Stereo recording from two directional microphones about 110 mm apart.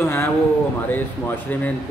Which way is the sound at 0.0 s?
20° left (ahead or behind).